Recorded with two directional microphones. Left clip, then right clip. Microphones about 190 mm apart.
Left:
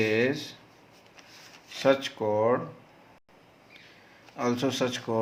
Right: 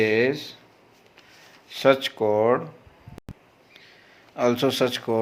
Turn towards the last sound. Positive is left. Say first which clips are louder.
# right 6 dB
turn(degrees=-35)  # may be behind; listen again after turning